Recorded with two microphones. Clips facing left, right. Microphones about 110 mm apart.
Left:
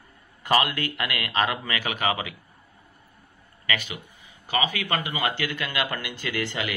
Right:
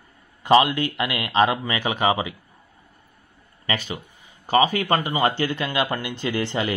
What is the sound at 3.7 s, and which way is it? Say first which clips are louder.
Speech: right 3 dB; 35° right (ahead or behind).